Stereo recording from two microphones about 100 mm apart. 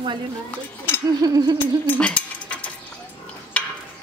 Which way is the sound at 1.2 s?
40° right (ahead or behind).